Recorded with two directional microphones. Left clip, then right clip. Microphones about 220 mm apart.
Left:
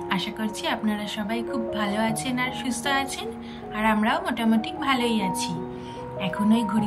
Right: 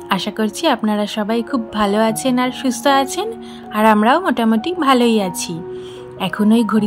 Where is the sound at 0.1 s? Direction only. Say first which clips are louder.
Right 11 dB; 20° right (ahead or behind).